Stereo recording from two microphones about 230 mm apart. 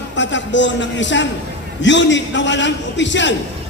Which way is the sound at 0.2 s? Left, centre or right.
Left.